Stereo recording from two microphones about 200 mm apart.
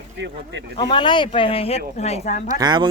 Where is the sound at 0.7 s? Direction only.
20° left (ahead or behind).